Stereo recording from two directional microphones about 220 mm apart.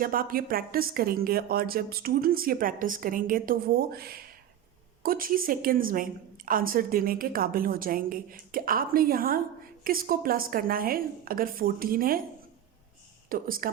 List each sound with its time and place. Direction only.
0.0 s a woman's voice: 40° right (ahead or behind)
13.3 s a woman's voice: 40° right (ahead or behind)